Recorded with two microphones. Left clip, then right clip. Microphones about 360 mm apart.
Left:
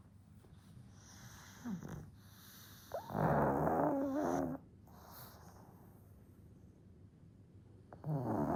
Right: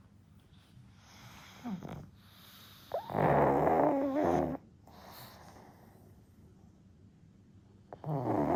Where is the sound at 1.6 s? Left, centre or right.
Right.